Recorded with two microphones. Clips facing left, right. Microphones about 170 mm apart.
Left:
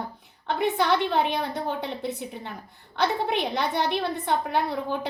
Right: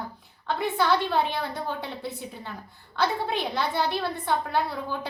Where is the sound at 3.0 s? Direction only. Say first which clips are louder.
Left 2 dB; 20° left (ahead or behind).